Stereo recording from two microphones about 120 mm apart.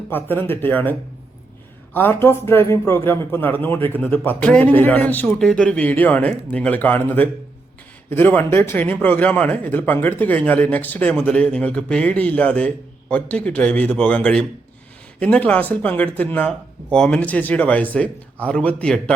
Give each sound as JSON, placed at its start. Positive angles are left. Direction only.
{"t": 0.1, "sound": "speech", "side_deg": 15}